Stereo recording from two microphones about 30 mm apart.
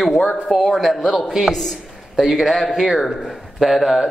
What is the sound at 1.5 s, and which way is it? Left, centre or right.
Speech, centre.